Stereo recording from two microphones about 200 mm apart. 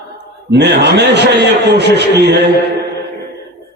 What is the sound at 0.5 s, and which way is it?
A man's voice, 60° right (ahead or behind).